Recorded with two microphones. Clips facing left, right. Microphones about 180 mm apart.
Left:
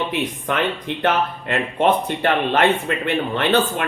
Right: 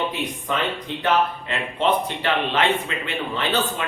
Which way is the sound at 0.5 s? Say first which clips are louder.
Left 3 dB; 70° left (ahead or behind).